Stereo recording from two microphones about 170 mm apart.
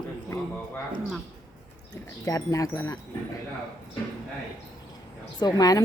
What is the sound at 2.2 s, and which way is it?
Speech, 20° left (ahead or behind).